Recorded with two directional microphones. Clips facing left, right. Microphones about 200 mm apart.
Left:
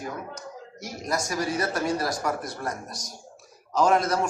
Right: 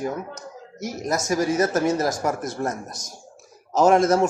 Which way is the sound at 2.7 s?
25° right (ahead or behind).